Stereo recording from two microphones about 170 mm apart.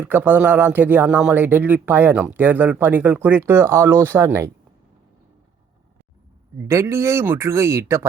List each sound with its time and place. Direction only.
0.0 s speech: 10° right (ahead or behind)
6.7 s speech: 15° right (ahead or behind)